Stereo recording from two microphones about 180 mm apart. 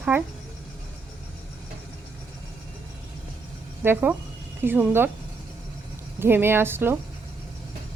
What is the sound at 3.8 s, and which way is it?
Speech, 10° right (ahead or behind).